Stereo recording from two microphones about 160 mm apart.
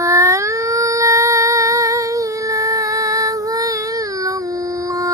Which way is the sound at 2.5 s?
20° right (ahead or behind).